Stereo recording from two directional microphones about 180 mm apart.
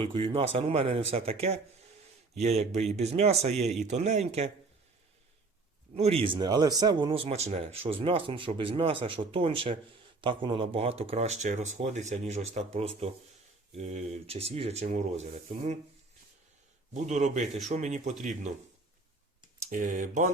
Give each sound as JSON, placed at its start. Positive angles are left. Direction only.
{"t": 0.0, "sound": "speech", "side_deg": -30}
{"t": 5.9, "sound": "speech", "side_deg": -35}
{"t": 16.9, "sound": "speech", "side_deg": -40}
{"t": 19.7, "sound": "speech", "side_deg": -45}